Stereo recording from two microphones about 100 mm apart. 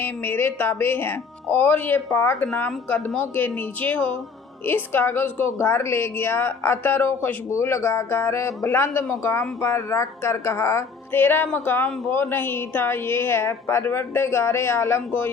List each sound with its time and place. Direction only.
0.0 s speech: 20° left (ahead or behind)